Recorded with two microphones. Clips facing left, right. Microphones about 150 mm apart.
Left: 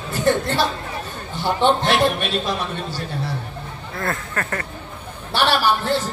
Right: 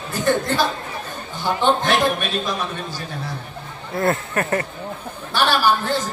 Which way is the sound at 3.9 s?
25° right (ahead or behind).